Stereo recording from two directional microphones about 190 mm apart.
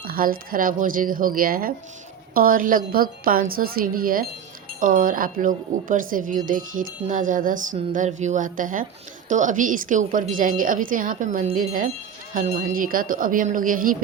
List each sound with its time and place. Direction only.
0.0 s speech: 50° right (ahead or behind)